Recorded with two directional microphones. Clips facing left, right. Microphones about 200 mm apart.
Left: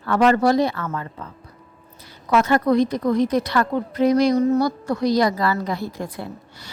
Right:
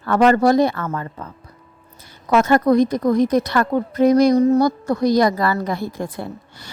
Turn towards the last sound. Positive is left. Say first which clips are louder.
# right 3 dB
turn(degrees=-50)  # may be behind; listen again after turning